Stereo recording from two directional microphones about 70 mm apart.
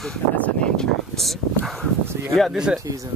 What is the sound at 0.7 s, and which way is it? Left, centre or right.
Speech, centre.